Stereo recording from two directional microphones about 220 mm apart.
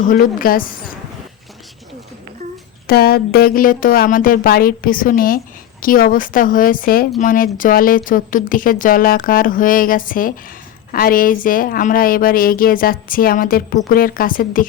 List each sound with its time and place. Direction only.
0.0 s speech: 40° left (ahead or behind)
2.8 s speech: 45° left (ahead or behind)